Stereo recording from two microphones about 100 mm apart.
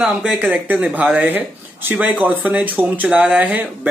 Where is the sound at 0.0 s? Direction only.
5° right (ahead or behind).